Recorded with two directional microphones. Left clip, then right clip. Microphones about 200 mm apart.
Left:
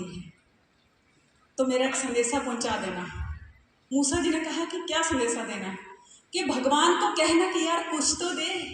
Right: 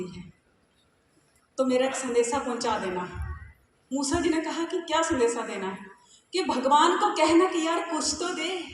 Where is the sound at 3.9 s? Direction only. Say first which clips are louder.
Even; 50° right (ahead or behind).